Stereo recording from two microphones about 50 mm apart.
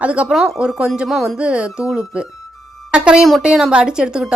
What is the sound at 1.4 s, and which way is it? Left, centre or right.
A woman's voice, right.